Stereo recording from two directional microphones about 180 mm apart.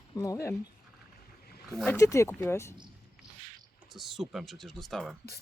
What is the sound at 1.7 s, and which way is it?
Speech, 5° left (ahead or behind).